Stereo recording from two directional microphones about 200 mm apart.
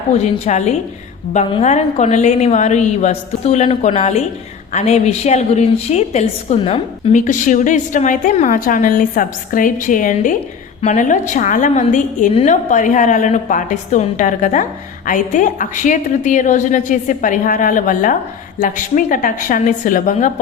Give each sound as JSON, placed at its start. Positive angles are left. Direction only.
{"t": 0.2, "sound": "a woman's voice", "side_deg": 35}